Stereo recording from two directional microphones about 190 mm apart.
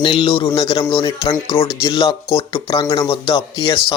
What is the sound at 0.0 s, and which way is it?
A man's voice, 25° left (ahead or behind).